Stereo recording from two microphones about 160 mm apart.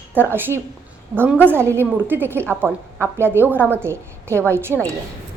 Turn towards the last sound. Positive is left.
turn(degrees=-15)  # may be behind; listen again after turning